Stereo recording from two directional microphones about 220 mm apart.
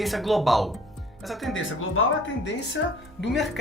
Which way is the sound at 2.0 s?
65° left (ahead or behind).